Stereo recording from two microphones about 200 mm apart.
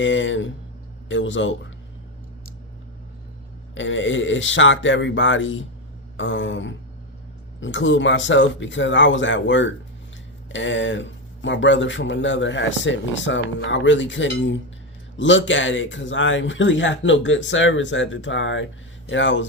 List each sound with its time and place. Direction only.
0.0 s speech: 70° left (ahead or behind)
3.8 s speech: 70° left (ahead or behind)